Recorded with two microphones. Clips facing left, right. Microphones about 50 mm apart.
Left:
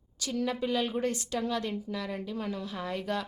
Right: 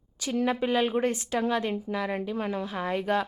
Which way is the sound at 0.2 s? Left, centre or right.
Right.